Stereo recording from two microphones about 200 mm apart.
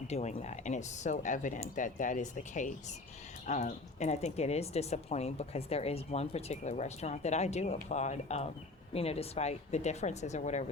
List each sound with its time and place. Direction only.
0.1 s speech: 35° left (ahead or behind)